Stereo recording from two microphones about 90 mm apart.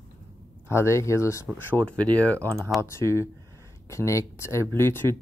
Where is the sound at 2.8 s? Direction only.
30° left (ahead or behind).